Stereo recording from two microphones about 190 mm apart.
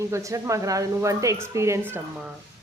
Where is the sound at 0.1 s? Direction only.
15° right (ahead or behind).